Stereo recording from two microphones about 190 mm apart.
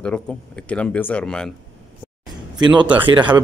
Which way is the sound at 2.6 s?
25° right (ahead or behind).